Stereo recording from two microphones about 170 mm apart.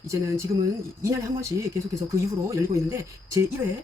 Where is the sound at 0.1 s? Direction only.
20° right (ahead or behind).